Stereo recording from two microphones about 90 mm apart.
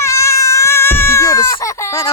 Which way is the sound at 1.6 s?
35° left (ahead or behind).